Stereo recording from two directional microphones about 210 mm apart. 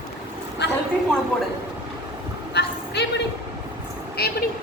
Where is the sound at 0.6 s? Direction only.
55° left (ahead or behind).